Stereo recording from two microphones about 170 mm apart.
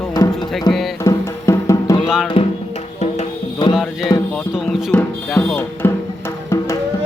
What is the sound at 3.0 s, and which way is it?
Music, 35° left (ahead or behind).